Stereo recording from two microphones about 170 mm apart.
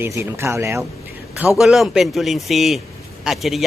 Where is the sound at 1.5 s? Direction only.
Centre (ahead or behind).